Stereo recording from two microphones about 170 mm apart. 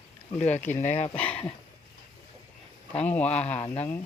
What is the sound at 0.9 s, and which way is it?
Speech, 40° left (ahead or behind).